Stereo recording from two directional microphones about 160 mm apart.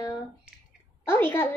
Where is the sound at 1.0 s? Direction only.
15° left (ahead or behind).